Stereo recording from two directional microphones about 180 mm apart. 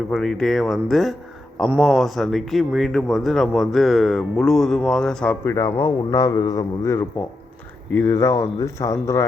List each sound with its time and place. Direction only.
0.1 s speech: centre (ahead or behind)
5.5 s a man's voice: 15° left (ahead or behind)